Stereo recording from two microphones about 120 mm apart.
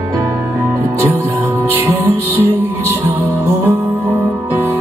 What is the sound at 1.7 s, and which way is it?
Music, 15° right (ahead or behind).